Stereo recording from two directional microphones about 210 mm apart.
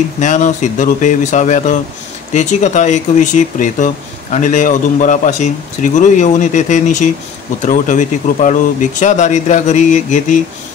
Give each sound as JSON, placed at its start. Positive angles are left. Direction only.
{"t": 0.2, "sound": "speech", "side_deg": 35}